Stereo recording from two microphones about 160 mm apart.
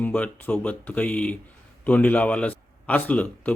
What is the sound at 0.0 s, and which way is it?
A man's voice, 10° left (ahead or behind).